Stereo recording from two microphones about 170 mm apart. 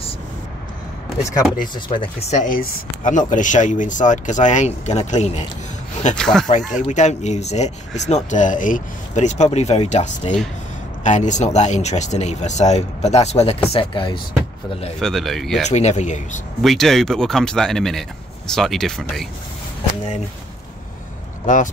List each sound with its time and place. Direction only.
1.9 s speech: 35° left (ahead or behind)
6.1 s speech: 5° left (ahead or behind)
6.7 s speech: 45° left (ahead or behind)
15.0 s speech: centre (ahead or behind)
15.7 s speech: 40° left (ahead or behind)
16.6 s speech: centre (ahead or behind)
21.5 s speech: 50° left (ahead or behind)